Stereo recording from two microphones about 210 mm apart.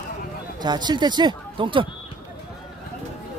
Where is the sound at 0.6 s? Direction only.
20° right (ahead or behind).